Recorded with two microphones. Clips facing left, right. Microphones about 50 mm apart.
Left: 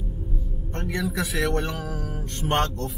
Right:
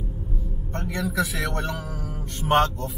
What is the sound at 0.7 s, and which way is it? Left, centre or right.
A man's voice, centre.